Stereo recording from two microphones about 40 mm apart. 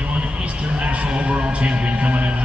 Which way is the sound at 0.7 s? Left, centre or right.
Right.